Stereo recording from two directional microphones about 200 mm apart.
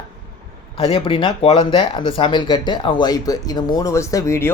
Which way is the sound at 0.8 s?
25° left (ahead or behind).